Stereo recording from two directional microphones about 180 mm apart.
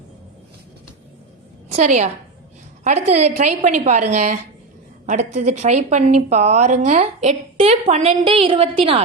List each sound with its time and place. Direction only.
1.7 s a woman's voice: 40° right (ahead or behind)
5.0 s a woman's voice: 45° right (ahead or behind)